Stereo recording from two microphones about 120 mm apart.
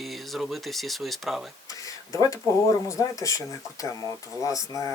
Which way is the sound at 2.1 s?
25° left (ahead or behind).